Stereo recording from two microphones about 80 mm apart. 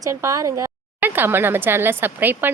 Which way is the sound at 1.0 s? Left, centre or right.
Right.